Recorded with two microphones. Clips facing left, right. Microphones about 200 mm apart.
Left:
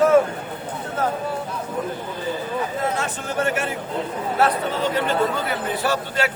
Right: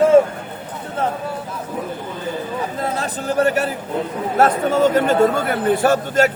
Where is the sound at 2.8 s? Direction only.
35° right (ahead or behind).